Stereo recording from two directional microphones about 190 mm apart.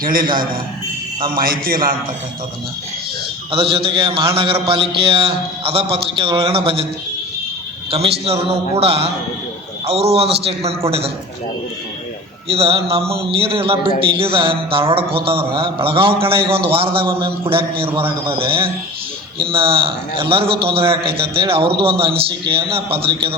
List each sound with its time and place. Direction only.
0.0 s a man's voice: 50° right (ahead or behind)
1.4 s a man's voice: 50° right (ahead or behind)
3.5 s a man's voice: 30° right (ahead or behind)
7.9 s a man's voice: 30° right (ahead or behind)
12.5 s a man's voice: 30° right (ahead or behind)